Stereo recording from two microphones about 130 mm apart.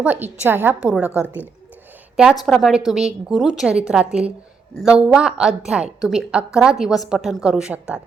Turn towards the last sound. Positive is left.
turn(degrees=-5)  # may be behind; listen again after turning